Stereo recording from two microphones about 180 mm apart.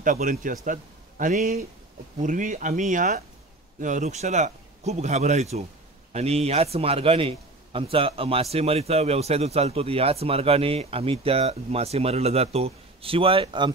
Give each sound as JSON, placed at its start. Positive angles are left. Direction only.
{"t": 0.0, "sound": "a man's voice", "side_deg": -50}